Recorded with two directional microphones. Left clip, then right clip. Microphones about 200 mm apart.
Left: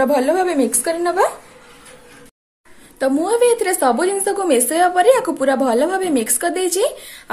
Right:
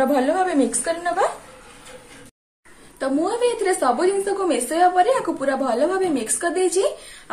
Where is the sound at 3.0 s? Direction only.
45° left (ahead or behind).